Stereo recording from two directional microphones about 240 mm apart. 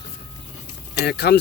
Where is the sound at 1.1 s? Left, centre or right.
Left.